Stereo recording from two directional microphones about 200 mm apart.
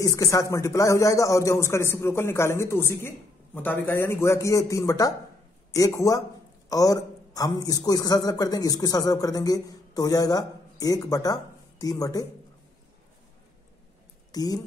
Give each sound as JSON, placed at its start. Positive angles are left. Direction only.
{"t": 0.0, "sound": "a man's voice", "side_deg": 15}
{"t": 14.3, "sound": "speech", "side_deg": 20}